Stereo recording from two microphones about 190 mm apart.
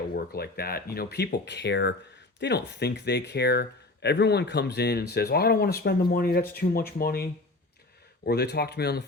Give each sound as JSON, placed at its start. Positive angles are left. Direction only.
{"t": 0.3, "sound": "speech", "side_deg": 55}